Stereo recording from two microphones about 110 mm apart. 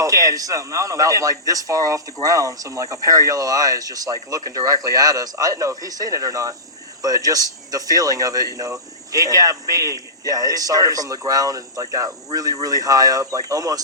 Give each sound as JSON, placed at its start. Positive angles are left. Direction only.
{"t": 0.0, "sound": "speech", "side_deg": -30}